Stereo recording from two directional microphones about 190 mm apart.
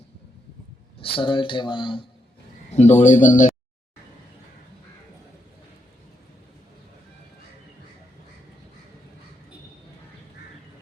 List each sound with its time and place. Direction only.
0.9 s speech: 25° left (ahead or behind)
2.7 s speech: 35° left (ahead or behind)